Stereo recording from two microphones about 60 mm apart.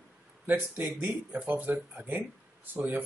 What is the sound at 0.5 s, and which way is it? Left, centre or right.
Speech, right.